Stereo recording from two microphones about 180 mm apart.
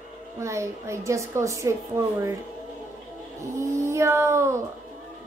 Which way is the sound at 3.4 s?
15° right (ahead or behind).